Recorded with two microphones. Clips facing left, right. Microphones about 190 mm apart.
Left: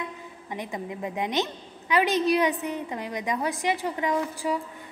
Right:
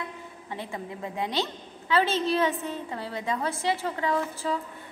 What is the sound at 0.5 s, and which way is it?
A woman's voice, 15° left (ahead or behind).